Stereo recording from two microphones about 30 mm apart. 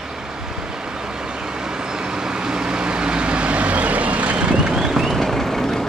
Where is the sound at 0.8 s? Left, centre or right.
Right.